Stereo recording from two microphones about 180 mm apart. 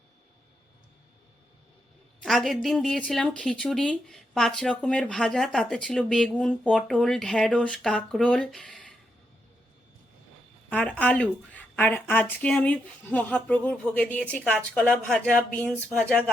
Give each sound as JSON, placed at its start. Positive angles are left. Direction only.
{"t": 2.2, "sound": "speech", "side_deg": 0}
{"t": 10.7, "sound": "speech", "side_deg": 5}